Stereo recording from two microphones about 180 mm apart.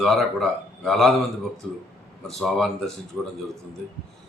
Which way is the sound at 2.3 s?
Centre (ahead or behind).